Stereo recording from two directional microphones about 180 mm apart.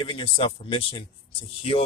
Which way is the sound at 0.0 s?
30° left (ahead or behind).